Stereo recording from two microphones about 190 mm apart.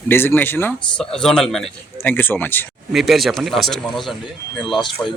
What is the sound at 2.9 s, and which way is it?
Speech, centre (ahead or behind).